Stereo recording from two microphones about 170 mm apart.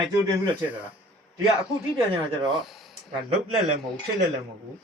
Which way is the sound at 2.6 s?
Centre (ahead or behind).